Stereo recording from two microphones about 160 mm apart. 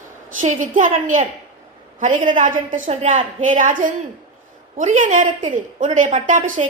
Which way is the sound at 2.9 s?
45° right (ahead or behind).